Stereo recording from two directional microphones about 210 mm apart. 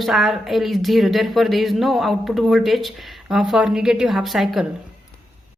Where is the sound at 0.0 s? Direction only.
Centre (ahead or behind).